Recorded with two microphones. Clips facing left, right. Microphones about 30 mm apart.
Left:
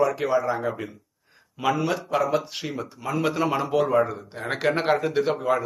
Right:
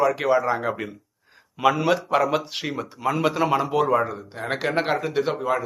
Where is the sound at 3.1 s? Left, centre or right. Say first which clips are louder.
Right 2 dB; centre.